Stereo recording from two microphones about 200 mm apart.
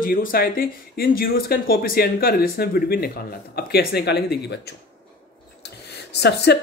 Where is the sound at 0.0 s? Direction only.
45° left (ahead or behind).